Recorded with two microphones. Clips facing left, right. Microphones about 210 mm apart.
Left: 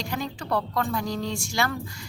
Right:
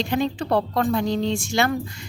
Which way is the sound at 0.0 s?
25° right (ahead or behind).